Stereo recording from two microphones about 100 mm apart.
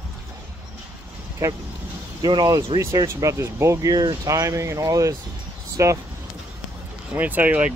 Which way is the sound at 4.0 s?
50° right (ahead or behind).